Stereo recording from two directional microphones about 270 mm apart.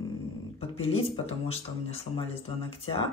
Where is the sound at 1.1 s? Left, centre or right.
Left.